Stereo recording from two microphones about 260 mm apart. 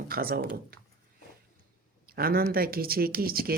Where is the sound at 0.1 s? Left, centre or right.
Right.